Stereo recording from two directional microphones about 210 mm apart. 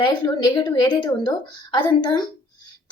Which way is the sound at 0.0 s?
20° left (ahead or behind).